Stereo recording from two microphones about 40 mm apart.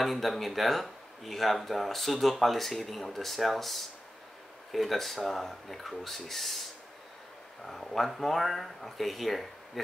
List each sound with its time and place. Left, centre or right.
0.0 s speech: centre
7.6 s speech: centre